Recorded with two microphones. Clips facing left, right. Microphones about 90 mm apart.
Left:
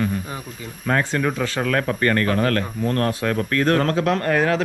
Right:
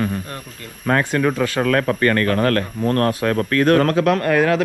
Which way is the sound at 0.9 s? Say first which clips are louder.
Right 3 dB; 55° right (ahead or behind).